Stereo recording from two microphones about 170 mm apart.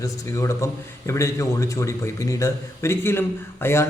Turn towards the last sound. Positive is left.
turn(degrees=15)  # may be behind; listen again after turning